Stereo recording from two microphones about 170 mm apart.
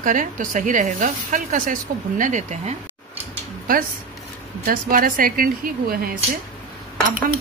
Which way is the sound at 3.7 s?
55° right (ahead or behind).